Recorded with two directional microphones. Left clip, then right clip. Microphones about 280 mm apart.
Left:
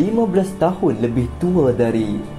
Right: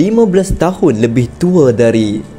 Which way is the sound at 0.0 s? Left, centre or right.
Right.